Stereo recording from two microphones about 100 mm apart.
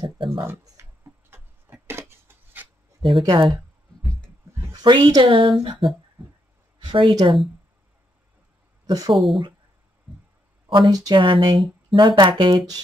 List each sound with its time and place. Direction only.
0.0 s speech: 60° right (ahead or behind)
1.3 s a sound: 25° right (ahead or behind)
3.2 s speech: 65° right (ahead or behind)
4.6 s a sound: 30° right (ahead or behind)
4.8 s speech: 50° right (ahead or behind)
6.8 s speech: 50° right (ahead or behind)
8.8 s speech: 40° right (ahead or behind)
9.1 s speech: centre (ahead or behind)
10.7 s speech: 45° right (ahead or behind)